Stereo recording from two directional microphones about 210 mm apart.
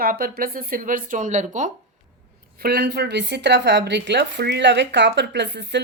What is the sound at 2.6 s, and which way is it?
A woman's voice, 50° right (ahead or behind).